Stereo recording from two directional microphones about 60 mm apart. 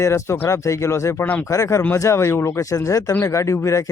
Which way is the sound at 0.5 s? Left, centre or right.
Left.